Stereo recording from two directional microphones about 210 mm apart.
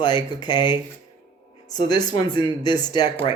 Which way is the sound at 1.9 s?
20° left (ahead or behind).